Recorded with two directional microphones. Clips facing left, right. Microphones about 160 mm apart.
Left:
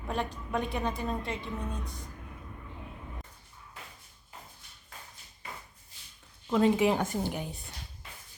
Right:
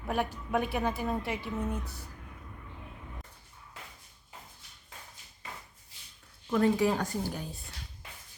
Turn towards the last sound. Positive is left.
turn(degrees=20)  # may be behind; listen again after turning